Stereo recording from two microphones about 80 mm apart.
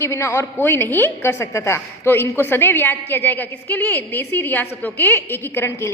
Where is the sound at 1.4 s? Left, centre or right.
Left.